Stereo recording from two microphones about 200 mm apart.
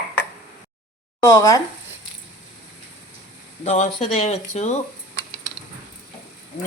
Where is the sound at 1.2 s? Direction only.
15° left (ahead or behind).